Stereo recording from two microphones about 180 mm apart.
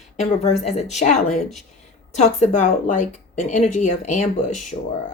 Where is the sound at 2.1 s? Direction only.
40° left (ahead or behind).